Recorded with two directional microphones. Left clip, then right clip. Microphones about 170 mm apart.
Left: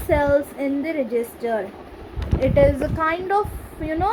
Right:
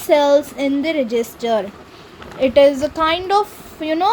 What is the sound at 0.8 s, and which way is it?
Speech, 55° right (ahead or behind).